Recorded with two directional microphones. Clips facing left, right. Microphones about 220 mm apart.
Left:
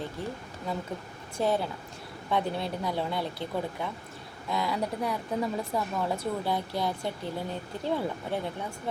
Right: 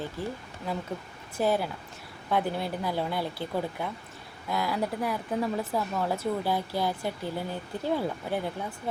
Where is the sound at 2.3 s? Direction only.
5° right (ahead or behind).